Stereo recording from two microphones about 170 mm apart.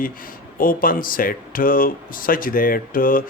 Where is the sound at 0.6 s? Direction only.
55° left (ahead or behind).